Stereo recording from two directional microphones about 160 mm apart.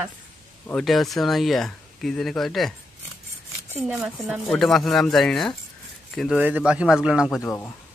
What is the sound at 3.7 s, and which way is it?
Speech, centre (ahead or behind).